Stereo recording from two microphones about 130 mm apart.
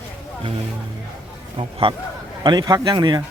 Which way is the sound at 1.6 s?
45° right (ahead or behind).